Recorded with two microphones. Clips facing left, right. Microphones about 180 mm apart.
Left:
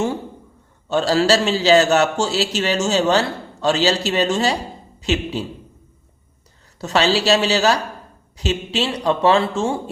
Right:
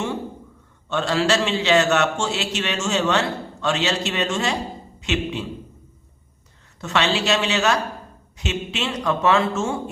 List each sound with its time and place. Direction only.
0.9 s a man's voice: 35° left (ahead or behind)
6.7 s a man's voice: 35° left (ahead or behind)